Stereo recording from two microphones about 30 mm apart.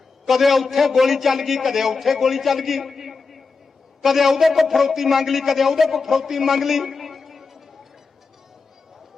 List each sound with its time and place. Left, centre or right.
0.3 s a man's voice: centre